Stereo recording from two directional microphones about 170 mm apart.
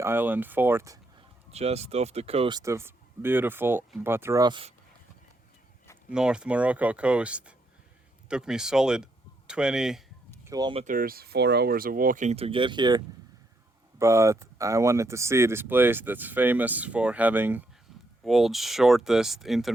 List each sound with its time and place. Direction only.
0.0 s speech: 10° right (ahead or behind)
1.5 s speech: 40° right (ahead or behind)
2.6 s speech: 15° right (ahead or behind)
6.1 s speech: 5° right (ahead or behind)
10.4 s speech: 20° right (ahead or behind)
10.8 s speech: 55° right (ahead or behind); by 13.0 s 25° right (ahead or behind)
14.0 s speech: 15° right (ahead or behind); by 19.7 s centre (ahead or behind)